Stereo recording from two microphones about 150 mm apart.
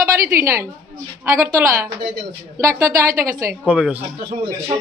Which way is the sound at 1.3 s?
20° right (ahead or behind).